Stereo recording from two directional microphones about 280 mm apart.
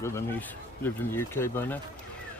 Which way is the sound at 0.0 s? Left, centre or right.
Centre.